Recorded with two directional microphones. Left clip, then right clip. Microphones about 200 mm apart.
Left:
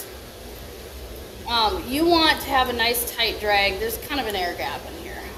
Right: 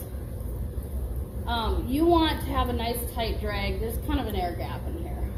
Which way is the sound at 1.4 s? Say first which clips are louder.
Left 8 dB; 35° left (ahead or behind).